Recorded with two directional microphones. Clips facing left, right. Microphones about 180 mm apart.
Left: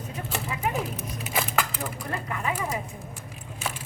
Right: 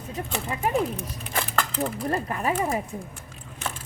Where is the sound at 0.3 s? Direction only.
Centre (ahead or behind).